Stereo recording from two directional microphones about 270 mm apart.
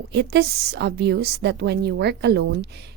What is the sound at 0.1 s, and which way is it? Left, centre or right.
A woman's voice, right.